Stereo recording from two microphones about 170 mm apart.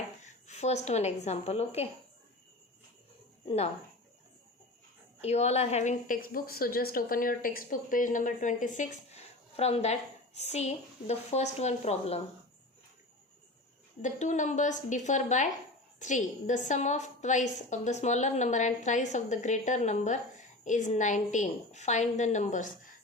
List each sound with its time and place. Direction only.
0.2 s a woman's voice: 45° left (ahead or behind)
5.2 s a woman's voice: 40° left (ahead or behind)
14.0 s a woman's voice: 45° left (ahead or behind)